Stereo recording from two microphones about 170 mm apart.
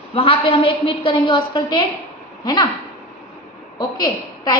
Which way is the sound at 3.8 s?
20° left (ahead or behind).